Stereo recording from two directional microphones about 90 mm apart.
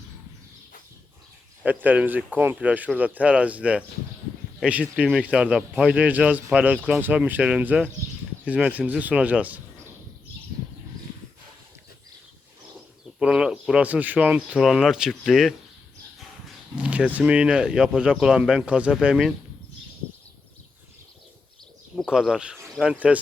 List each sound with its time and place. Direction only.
1.6 s speech: 20° right (ahead or behind)
13.1 s speech: 10° right (ahead or behind)
16.7 s speech: 15° right (ahead or behind)
22.1 s speech: 10° right (ahead or behind)